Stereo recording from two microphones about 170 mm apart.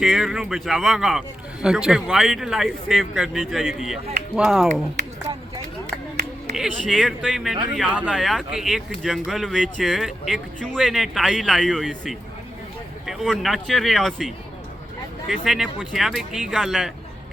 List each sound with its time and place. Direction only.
0.0 s speech: centre (ahead or behind)
6.8 s speech: centre (ahead or behind)